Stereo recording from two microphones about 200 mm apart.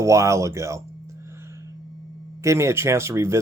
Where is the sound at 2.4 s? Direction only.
15° right (ahead or behind).